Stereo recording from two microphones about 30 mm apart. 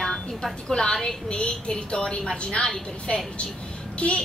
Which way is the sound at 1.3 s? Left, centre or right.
Left.